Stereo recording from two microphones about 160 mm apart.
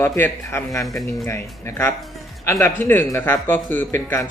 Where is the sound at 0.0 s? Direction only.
15° left (ahead or behind).